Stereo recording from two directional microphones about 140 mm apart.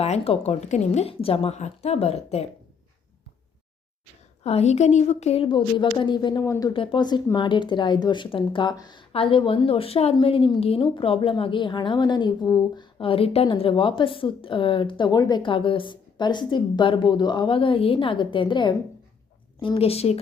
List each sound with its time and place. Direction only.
0.0 s a woman's voice: 50° left (ahead or behind)
4.4 s a woman's voice: 50° left (ahead or behind); by 6.7 s 25° left (ahead or behind)
6.7 s a woman's voice: 35° left (ahead or behind)